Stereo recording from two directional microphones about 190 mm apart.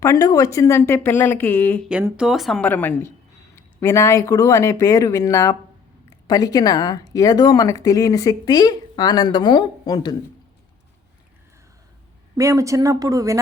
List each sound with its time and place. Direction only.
0.0 s speech: 15° left (ahead or behind)
1.9 s speech: 5° right (ahead or behind); by 10.2 s 20° left (ahead or behind)
12.4 s speech: 15° right (ahead or behind)